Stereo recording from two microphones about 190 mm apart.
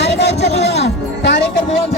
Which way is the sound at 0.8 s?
65° left (ahead or behind).